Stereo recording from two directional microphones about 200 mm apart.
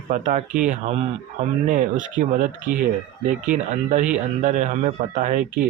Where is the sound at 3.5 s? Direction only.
35° right (ahead or behind).